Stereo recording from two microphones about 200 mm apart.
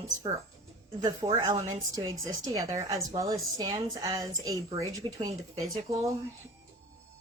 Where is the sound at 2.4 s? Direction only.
15° right (ahead or behind).